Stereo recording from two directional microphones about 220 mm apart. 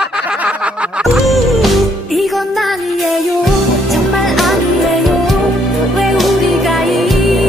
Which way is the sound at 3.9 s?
Centre (ahead or behind).